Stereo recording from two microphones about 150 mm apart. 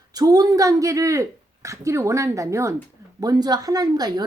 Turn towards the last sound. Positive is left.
turn(degrees=-25)  # may be behind; listen again after turning